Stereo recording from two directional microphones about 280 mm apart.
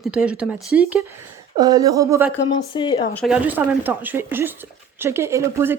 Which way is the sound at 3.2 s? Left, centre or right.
Centre.